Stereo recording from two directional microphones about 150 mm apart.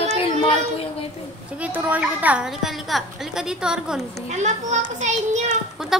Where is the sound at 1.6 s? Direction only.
10° right (ahead or behind).